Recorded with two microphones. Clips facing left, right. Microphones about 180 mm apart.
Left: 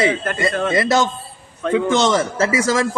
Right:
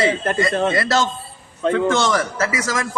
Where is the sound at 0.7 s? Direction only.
15° left (ahead or behind).